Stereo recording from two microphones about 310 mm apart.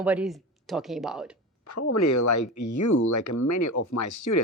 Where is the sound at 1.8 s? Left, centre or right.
Left.